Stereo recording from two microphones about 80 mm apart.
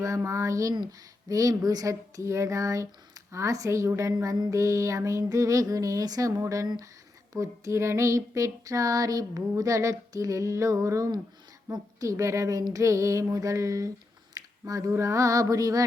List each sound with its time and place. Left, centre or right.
0.2 s speech: right
4.5 s female singing: right
14.4 s a sound: right
14.7 s female singing: right